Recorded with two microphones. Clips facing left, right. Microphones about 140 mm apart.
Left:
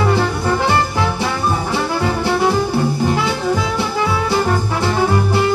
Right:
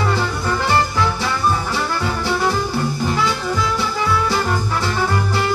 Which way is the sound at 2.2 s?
25° left (ahead or behind).